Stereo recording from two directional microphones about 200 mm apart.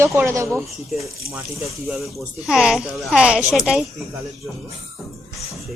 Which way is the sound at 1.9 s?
Centre (ahead or behind).